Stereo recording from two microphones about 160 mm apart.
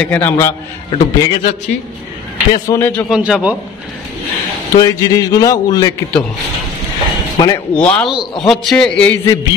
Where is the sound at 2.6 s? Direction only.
20° left (ahead or behind).